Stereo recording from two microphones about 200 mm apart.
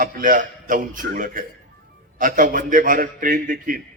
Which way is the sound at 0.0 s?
45° right (ahead or behind).